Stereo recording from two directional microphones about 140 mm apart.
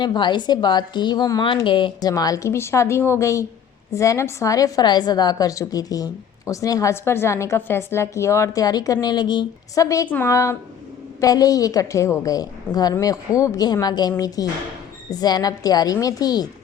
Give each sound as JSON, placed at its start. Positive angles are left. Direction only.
{"t": 0.0, "sound": "a woman's voice", "side_deg": 30}